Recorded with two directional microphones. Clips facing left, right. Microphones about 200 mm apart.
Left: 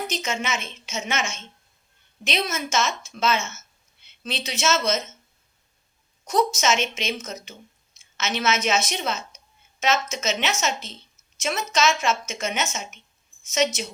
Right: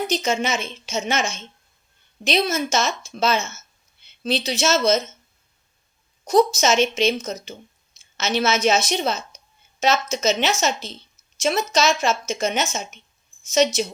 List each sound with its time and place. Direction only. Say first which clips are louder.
0.1 s a woman's voice: right 6 dB; 35° right (ahead or behind)
6.2 s a woman's voice: right 5 dB; 35° right (ahead or behind)